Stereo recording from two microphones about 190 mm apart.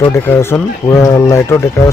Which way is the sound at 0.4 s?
15° left (ahead or behind).